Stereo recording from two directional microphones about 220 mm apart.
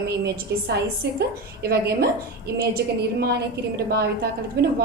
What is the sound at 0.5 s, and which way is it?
A woman's voice, 50° right (ahead or behind).